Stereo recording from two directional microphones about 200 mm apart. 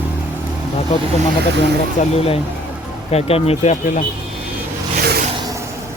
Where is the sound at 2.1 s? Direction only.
30° left (ahead or behind).